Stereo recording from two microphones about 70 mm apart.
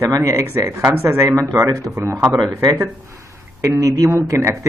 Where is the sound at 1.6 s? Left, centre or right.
Right.